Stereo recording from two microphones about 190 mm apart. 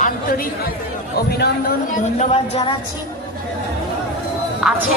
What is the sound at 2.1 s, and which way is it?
Speech, 35° left (ahead or behind).